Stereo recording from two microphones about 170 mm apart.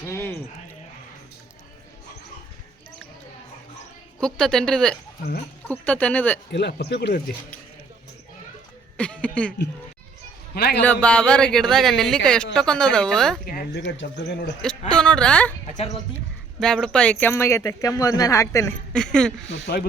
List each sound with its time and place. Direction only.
0.0 s speech: 15° left (ahead or behind)
4.2 s speech: 5° left (ahead or behind)
6.5 s speech: 80° left
9.0 s speech: 5° left (ahead or behind)
10.5 s a man's voice: 65° left (ahead or behind)
10.8 s speech: 10° left (ahead or behind)
13.4 s speech: 60° left (ahead or behind); by 14.5 s 85° left
14.6 s speech: 5° left (ahead or behind)
16.6 s speech: 5° left (ahead or behind)
18.9 s speech: 5° left (ahead or behind)